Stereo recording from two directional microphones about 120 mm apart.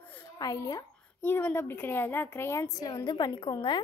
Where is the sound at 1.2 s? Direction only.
15° left (ahead or behind); by 3.7 s 35° left (ahead or behind).